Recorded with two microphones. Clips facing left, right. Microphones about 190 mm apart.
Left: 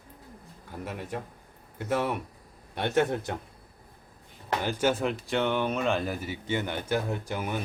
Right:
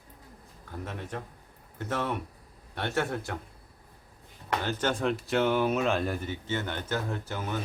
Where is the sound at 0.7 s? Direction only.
10° left (ahead or behind).